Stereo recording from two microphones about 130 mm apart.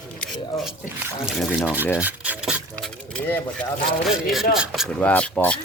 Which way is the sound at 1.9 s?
10° right (ahead or behind).